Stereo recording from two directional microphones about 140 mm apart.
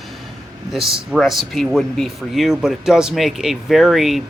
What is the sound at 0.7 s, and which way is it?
Speech, centre (ahead or behind).